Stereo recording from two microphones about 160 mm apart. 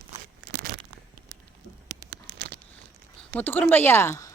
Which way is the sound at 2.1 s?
85° right.